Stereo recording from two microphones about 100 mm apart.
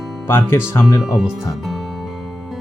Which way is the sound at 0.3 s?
25° left (ahead or behind).